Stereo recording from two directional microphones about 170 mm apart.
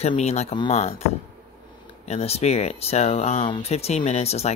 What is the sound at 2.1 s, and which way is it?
Speech, 35° left (ahead or behind).